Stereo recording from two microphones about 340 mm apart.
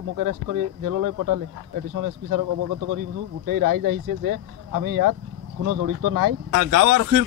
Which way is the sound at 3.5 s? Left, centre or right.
Right.